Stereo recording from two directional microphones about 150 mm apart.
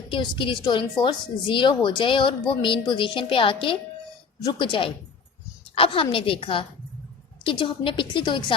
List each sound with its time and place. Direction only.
0.1 s a woman's voice: 35° left (ahead or behind)